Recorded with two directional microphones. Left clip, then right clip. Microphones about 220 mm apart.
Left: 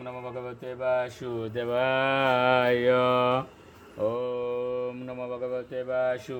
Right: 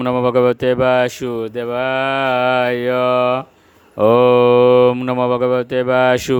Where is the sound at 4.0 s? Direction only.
50° right (ahead or behind).